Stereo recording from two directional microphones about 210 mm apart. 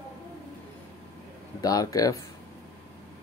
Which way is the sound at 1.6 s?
15° left (ahead or behind).